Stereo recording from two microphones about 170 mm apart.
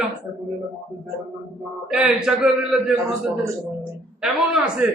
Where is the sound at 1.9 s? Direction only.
5° right (ahead or behind).